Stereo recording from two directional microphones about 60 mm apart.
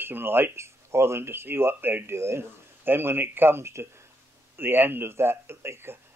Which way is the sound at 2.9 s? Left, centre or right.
Right.